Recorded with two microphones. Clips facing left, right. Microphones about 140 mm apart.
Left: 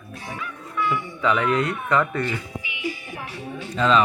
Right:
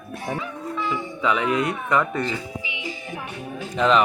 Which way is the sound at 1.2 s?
15° right (ahead or behind).